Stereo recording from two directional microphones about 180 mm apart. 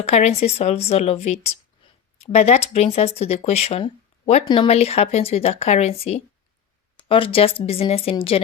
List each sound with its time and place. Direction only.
0.0 s speech: 35° left (ahead or behind)